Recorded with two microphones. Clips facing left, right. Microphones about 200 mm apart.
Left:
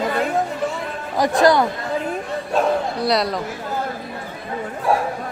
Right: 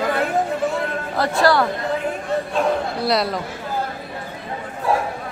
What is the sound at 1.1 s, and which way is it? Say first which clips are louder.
Speech: left 2 dB; 15° left (ahead or behind).